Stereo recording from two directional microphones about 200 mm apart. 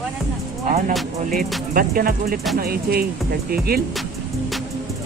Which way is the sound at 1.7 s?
45° right (ahead or behind).